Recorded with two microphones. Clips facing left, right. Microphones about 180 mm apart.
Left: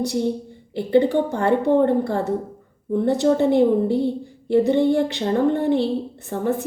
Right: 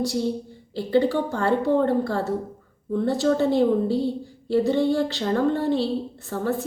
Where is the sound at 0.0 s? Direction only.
20° left (ahead or behind).